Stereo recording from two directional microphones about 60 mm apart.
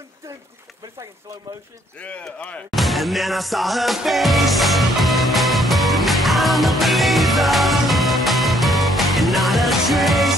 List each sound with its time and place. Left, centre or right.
2.0 s speech: left
2.7 s music: centre